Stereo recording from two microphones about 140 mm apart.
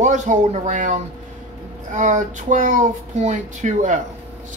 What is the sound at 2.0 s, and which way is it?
Speech, 65° right (ahead or behind).